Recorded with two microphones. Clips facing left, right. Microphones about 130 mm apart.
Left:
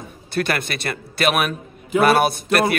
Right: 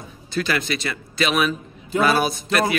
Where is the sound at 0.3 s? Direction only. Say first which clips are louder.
Left 1 dB; 55° left (ahead or behind).